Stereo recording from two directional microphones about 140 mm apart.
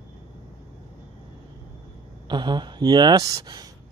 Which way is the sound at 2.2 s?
35° right (ahead or behind).